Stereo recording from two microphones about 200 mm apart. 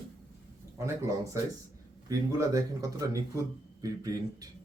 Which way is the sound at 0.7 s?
15° right (ahead or behind).